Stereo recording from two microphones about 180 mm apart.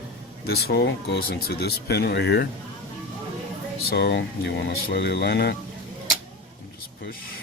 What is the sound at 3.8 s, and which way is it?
Speech, 65° left (ahead or behind).